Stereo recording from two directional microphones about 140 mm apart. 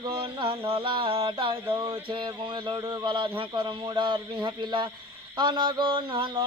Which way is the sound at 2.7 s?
35° right (ahead or behind).